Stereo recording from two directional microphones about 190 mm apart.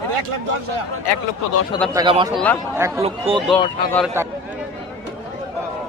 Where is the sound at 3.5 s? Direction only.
Centre (ahead or behind).